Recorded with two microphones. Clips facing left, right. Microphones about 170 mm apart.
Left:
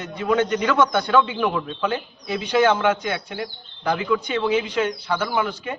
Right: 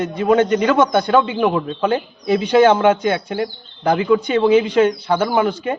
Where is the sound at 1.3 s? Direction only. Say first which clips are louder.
Right 6 dB; 35° right (ahead or behind).